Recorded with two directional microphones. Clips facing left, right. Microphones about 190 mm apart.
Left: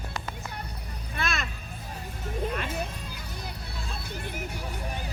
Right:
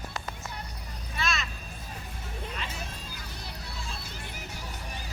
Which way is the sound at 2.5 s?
55° left (ahead or behind).